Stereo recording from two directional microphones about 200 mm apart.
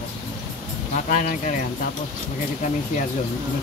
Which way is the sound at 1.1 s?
40° left (ahead or behind).